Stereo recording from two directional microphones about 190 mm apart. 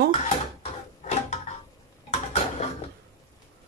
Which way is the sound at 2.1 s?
35° left (ahead or behind).